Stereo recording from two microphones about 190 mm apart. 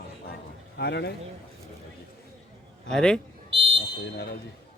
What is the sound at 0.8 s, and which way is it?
Speech, 60° left (ahead or behind).